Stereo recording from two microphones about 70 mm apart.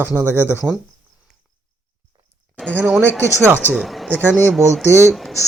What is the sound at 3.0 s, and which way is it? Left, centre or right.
Speech, left.